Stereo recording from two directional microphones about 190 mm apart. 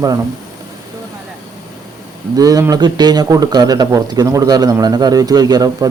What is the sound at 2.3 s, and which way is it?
Speech, 20° right (ahead or behind).